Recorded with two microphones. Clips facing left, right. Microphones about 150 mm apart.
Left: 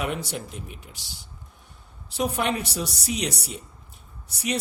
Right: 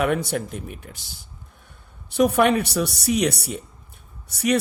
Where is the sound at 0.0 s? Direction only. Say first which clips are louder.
Right 7 dB; 55° right (ahead or behind).